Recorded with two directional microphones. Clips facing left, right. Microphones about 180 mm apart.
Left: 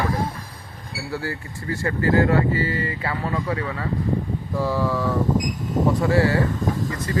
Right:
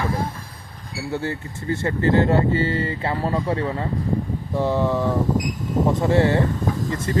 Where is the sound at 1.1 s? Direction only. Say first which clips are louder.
Right 3 dB; 20° right (ahead or behind).